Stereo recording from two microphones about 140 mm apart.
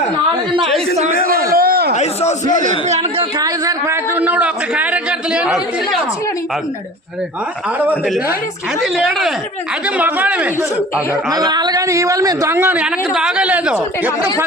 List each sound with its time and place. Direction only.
1.3 s a sound: 90° right
2.0 s a man's voice: 55° left (ahead or behind)
2.9 s a woman's voice: 50° right (ahead or behind)
3.3 s a man's voice: 25° right (ahead or behind); by 6.0 s 5° right (ahead or behind)
8.8 s a man's voice: 5° right (ahead or behind)
11.3 s a man's voice: 30° right (ahead or behind)
12.8 s a man's voice: 5° right (ahead or behind)